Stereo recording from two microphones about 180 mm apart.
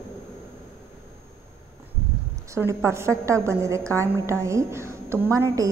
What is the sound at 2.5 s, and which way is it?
A woman's voice, 15° right (ahead or behind).